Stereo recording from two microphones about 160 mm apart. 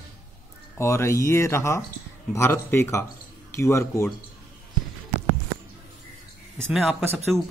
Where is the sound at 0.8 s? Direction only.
15° left (ahead or behind).